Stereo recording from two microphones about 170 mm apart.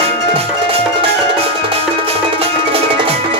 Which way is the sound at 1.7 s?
35° right (ahead or behind).